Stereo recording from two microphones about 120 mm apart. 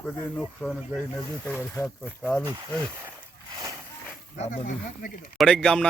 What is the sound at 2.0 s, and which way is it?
Speech, 10° left (ahead or behind).